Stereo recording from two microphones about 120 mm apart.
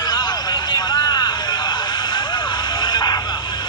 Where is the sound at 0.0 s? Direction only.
35° left (ahead or behind).